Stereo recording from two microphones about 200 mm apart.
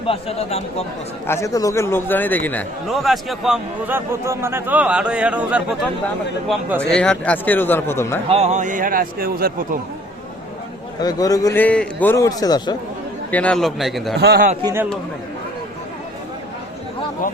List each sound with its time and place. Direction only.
0.1 s speech: 30° left (ahead or behind)
1.3 s speech: 15° left (ahead or behind); by 6.8 s 10° right (ahead or behind)
6.9 s a man's voice: 5° left (ahead or behind)
8.3 s a man's voice: 30° right (ahead or behind); by 9.6 s 50° right (ahead or behind)
11.0 s a man's voice: 15° left (ahead or behind)
13.3 s speech: 5° left (ahead or behind)
14.2 s a man's voice: 55° right (ahead or behind)
14.6 s speech: 15° right (ahead or behind)